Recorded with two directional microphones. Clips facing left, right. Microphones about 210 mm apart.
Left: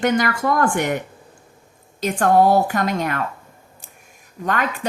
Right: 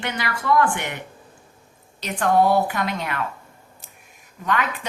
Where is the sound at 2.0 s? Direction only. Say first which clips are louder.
Left 3 dB; 45° left (ahead or behind).